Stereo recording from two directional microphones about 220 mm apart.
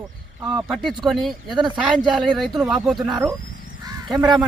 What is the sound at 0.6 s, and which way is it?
Speech, centre (ahead or behind).